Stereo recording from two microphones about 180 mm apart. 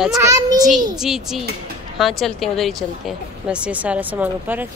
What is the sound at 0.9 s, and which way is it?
Speech, centre (ahead or behind).